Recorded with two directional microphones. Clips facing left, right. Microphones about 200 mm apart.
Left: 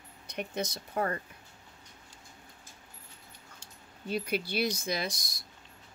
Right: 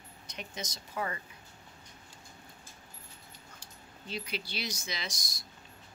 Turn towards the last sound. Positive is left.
turn(degrees=55)  # may be behind; listen again after turning